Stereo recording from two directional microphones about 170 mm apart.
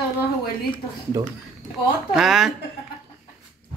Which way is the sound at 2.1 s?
Centre (ahead or behind).